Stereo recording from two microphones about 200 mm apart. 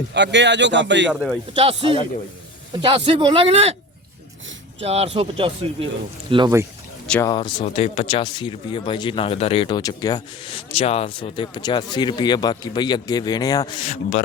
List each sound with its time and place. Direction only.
0.1 s a man's voice: 60° right (ahead or behind)
1.5 s speech: 25° right (ahead or behind)
4.8 s speech: 30° right (ahead or behind)
6.3 s speech: 20° right (ahead or behind)
7.1 s speech: 15° left (ahead or behind)
7.3 s speech: 25° left (ahead or behind)
13.8 s a man's voice: 30° left (ahead or behind)